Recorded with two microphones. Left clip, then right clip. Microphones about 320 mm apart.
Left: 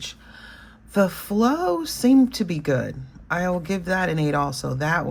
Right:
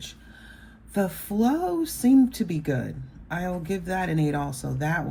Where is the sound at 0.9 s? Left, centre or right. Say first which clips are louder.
Left 6 dB; centre.